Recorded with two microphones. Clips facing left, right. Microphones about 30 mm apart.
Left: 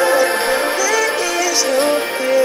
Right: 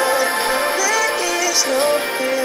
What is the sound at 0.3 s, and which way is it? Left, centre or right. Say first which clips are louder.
Music: left 2 dB; left.